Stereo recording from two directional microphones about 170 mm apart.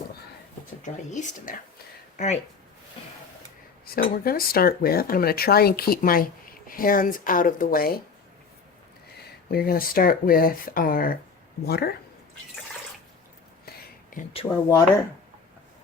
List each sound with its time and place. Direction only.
0.8 s speech: 45° left (ahead or behind)
3.8 s speech: 60° left (ahead or behind)
9.5 s speech: 60° left (ahead or behind)
14.4 s speech: 15° left (ahead or behind)